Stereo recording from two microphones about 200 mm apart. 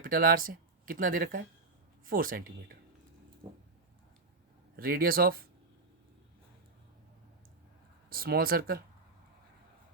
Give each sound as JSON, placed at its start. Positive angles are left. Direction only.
{"t": 0.0, "sound": "speech", "side_deg": -45}
{"t": 3.4, "sound": "a sound", "side_deg": -15}
{"t": 4.8, "sound": "speech", "side_deg": -45}
{"t": 8.1, "sound": "speech", "side_deg": -45}